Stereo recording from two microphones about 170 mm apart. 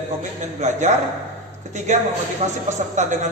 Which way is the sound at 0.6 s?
45° right (ahead or behind).